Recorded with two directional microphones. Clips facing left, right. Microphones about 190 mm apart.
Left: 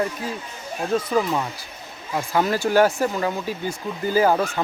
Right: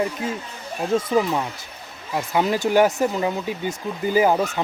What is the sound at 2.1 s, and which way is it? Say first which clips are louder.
Speech: even; 10° right (ahead or behind).